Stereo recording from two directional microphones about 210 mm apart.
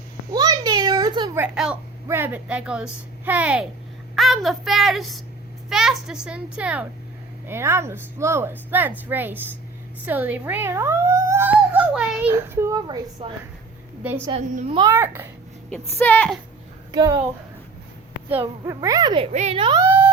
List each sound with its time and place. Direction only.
0.3 s a sound: 20° right (ahead or behind)
1.5 s a child's voice: 5° right (ahead or behind)
13.2 s a child's voice: 25° right (ahead or behind)
14.7 s speech: 20° right (ahead or behind)
14.9 s speech: 10° right (ahead or behind)
15.7 s a woman's voice: 10° left (ahead or behind)
16.9 s a woman's voice: 20° right (ahead or behind)
18.6 s speech: 15° right (ahead or behind)
19.8 s a sound: 10° right (ahead or behind)